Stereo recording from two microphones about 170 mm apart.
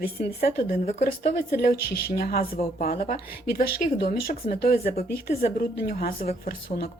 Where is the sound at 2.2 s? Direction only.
60° left (ahead or behind).